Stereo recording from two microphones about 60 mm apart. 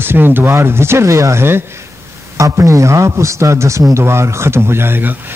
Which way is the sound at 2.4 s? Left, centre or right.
Right.